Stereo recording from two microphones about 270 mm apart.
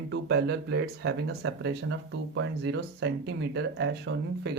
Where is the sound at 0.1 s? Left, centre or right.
Right.